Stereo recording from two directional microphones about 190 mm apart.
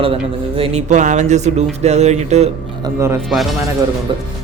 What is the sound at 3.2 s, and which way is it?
Speech, centre (ahead or behind).